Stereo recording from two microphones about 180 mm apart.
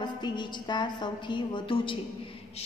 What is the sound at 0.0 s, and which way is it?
A woman's voice, 25° left (ahead or behind).